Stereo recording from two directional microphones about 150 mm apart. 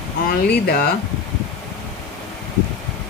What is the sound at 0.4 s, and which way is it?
Speech, 90° left.